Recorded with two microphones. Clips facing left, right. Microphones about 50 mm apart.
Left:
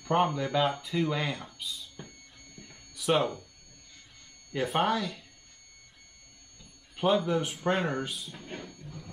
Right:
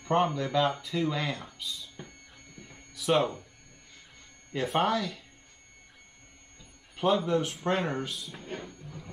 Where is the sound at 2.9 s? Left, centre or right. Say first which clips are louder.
Right 1 dB; centre.